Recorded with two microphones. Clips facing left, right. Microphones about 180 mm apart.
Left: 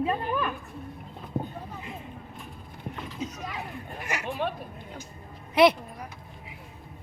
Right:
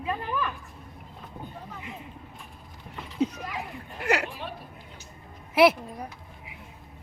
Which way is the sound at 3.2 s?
60° right (ahead or behind).